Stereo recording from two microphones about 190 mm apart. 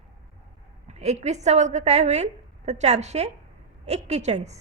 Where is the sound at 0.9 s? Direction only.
35° right (ahead or behind).